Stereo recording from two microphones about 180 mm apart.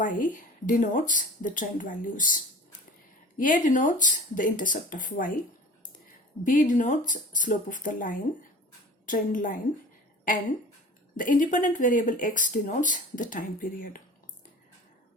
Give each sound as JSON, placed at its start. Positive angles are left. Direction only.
{"t": 0.0, "sound": "speech", "side_deg": 50}
{"t": 6.4, "sound": "speech", "side_deg": 45}
{"t": 11.2, "sound": "speech", "side_deg": 45}